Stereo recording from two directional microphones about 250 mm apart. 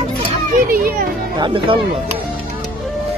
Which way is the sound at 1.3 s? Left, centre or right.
Centre.